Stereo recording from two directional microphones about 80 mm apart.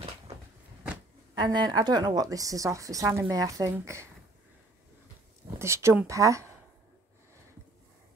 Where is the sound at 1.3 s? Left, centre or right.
Right.